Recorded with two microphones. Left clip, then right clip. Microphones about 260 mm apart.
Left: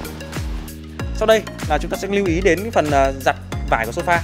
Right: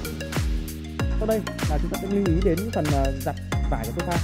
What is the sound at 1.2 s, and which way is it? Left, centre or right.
Speech, centre.